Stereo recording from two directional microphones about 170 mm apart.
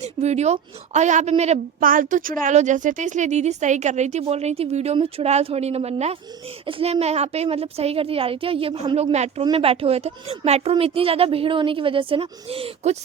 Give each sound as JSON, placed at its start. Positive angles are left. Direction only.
{"t": 0.0, "sound": "a woman's voice", "side_deg": -40}
{"t": 1.8, "sound": "a woman's voice", "side_deg": -55}